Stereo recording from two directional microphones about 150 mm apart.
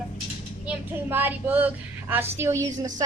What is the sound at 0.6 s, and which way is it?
A woman's voice, 15° right (ahead or behind).